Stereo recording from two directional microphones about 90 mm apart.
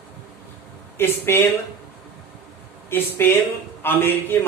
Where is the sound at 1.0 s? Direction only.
25° left (ahead or behind).